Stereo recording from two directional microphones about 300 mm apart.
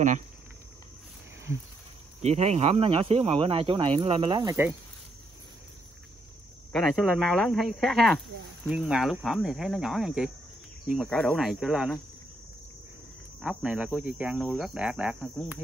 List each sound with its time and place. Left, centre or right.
2.2 s speech: right
6.7 s speech: centre
13.4 s speech: centre